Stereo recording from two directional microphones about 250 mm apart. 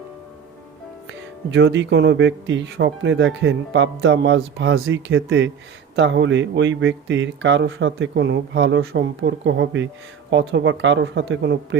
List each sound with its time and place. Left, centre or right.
1.5 s speech: right